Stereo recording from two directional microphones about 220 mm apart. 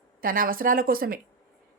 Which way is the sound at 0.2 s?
40° right (ahead or behind).